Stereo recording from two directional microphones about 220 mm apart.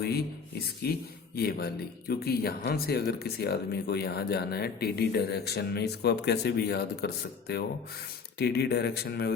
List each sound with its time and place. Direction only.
0.8 s speech: 45° left (ahead or behind)